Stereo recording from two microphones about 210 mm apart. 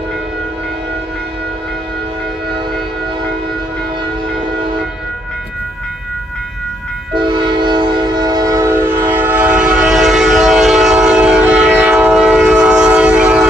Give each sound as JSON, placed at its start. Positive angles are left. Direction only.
{"t": 7.2, "sound": "train", "side_deg": -20}